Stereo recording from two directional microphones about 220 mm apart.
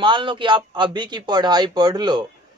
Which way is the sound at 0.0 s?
20° right (ahead or behind).